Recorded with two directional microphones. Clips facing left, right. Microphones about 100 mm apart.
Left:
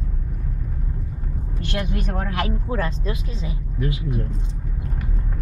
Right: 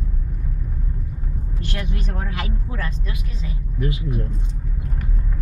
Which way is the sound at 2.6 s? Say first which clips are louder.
Left 6 dB; 30° left (ahead or behind).